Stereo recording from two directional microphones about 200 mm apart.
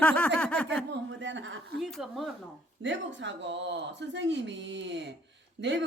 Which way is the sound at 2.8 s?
65° right (ahead or behind).